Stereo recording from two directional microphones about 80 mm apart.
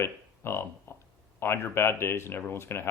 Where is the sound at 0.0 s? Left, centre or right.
Left.